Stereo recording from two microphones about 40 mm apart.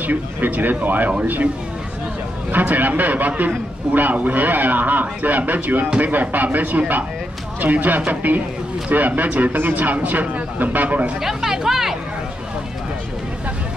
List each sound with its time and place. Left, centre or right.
0.0 s a man's voice: right
2.5 s a man's voice: right
11.1 s speech: centre